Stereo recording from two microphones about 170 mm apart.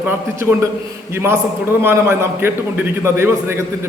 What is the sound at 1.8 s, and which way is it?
A man's voice, 15° right (ahead or behind).